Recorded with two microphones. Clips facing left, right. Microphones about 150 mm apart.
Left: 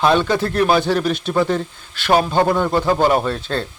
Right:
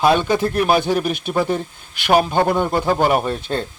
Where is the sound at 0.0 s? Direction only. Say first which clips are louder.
Even; 10° right (ahead or behind).